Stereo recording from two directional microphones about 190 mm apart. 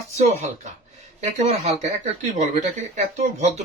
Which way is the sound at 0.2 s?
35° right (ahead or behind).